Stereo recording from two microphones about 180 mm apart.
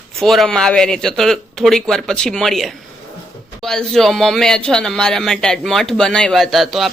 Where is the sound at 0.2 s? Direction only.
Centre (ahead or behind).